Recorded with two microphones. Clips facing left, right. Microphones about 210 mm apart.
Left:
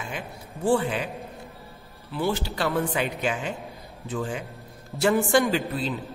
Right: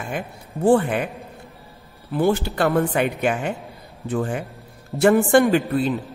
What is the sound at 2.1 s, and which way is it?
A woman's voice, 50° right (ahead or behind).